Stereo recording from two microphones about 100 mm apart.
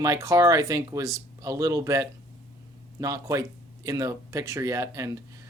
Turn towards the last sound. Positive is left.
turn(degrees=-35)  # may be behind; listen again after turning